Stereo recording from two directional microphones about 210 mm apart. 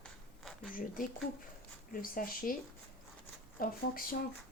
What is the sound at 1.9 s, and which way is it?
Speech, 40° left (ahead or behind).